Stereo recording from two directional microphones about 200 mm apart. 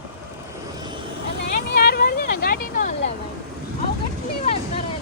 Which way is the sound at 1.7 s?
50° left (ahead or behind).